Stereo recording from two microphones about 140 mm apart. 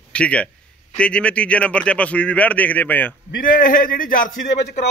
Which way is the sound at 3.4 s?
85° left.